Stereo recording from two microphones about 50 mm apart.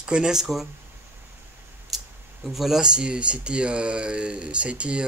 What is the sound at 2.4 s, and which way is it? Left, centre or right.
Speech, centre.